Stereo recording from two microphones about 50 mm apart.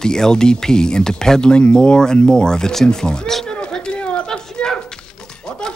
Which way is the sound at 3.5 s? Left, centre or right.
Centre.